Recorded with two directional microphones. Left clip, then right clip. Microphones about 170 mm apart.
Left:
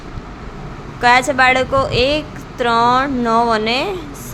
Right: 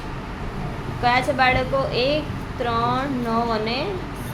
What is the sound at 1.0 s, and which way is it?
A woman's voice, 35° left (ahead or behind).